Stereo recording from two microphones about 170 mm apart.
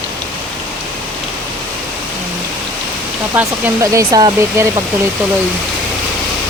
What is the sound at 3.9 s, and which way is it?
Speech, 25° right (ahead or behind).